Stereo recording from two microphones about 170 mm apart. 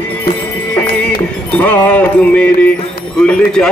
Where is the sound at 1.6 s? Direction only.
10° left (ahead or behind).